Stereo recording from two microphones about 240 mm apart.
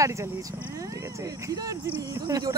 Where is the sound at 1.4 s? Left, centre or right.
Centre.